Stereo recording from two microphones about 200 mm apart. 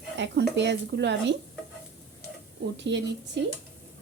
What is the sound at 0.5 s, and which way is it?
Speech, 60° right (ahead or behind).